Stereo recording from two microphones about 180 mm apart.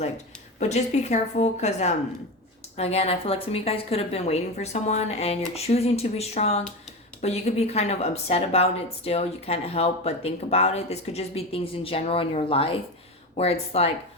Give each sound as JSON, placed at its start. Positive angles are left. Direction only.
{"t": 0.6, "sound": "speech", "side_deg": 40}